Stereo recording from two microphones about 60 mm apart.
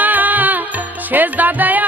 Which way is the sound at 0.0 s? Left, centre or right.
Right.